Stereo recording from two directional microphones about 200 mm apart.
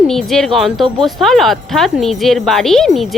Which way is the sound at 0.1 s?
Centre (ahead or behind).